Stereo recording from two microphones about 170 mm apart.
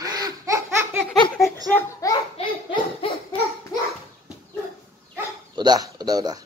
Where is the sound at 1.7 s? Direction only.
20° left (ahead or behind).